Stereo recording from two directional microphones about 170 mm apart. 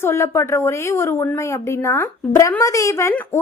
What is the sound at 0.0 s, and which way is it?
A woman's voice, 15° left (ahead or behind).